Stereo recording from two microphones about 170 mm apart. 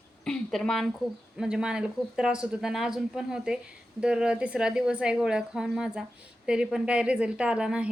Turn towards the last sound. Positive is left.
turn(degrees=-5)  # may be behind; listen again after turning